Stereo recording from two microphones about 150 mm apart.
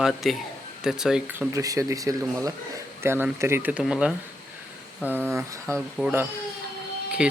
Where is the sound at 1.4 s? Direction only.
20° right (ahead or behind); by 4.1 s 5° right (ahead or behind).